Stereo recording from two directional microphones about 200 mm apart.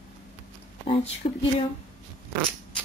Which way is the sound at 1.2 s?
35° left (ahead or behind).